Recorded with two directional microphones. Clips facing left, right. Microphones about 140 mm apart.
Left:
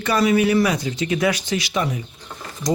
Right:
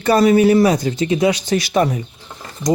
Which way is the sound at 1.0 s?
20° right (ahead or behind).